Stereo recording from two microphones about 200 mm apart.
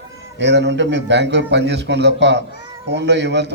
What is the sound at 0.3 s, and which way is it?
A man's voice, 60° right (ahead or behind).